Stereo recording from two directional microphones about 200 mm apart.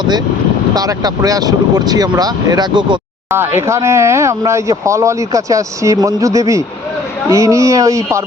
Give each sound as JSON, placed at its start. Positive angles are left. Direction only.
{"t": 0.7, "sound": "speech", "side_deg": -20}
{"t": 3.3, "sound": "speech", "side_deg": -10}